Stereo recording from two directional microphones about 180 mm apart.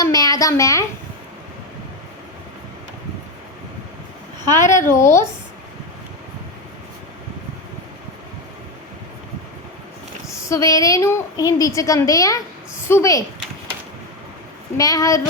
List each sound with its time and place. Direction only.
0.0 s speech: 20° left (ahead or behind)
4.7 s speech: 15° left (ahead or behind)
10.3 s a woman's voice: 15° left (ahead or behind)
14.8 s a woman's voice: 20° left (ahead or behind)